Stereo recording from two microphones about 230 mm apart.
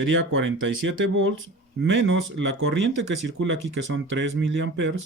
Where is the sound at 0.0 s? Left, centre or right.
Right.